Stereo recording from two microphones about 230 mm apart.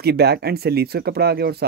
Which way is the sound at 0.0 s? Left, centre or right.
Right.